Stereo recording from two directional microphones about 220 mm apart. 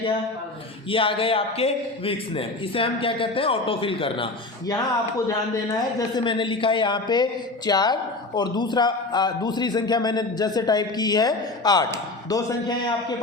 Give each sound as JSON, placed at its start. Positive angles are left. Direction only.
{"t": 0.9, "sound": "a man's voice", "side_deg": 25}